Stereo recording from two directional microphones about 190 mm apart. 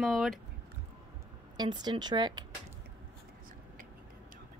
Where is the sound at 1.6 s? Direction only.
20° right (ahead or behind).